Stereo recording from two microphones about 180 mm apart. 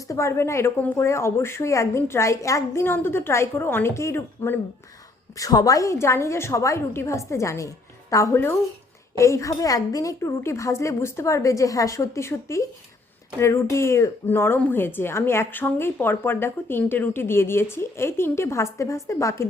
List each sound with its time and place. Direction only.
0.1 s a woman's voice: 15° left (ahead or behind)